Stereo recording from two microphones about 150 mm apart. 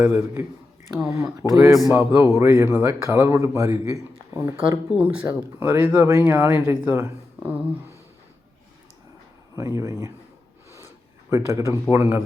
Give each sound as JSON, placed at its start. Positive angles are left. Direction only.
{"t": 0.0, "sound": "a man's voice", "side_deg": -15}
{"t": 4.9, "sound": "speech", "side_deg": -10}
{"t": 9.6, "sound": "a man's voice", "side_deg": -20}
{"t": 11.3, "sound": "speech", "side_deg": -20}